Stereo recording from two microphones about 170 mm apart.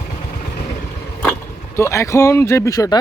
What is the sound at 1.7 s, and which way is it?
Speech, 15° left (ahead or behind).